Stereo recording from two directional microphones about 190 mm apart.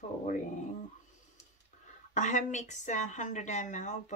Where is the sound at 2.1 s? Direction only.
40° left (ahead or behind).